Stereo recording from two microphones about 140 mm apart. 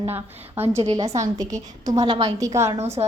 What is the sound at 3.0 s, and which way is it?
Speech, 35° right (ahead or behind).